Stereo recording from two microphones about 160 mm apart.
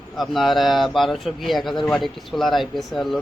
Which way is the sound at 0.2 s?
Centre (ahead or behind).